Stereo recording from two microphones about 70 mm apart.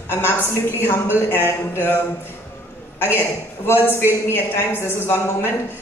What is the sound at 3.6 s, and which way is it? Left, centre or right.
A man's voice, left.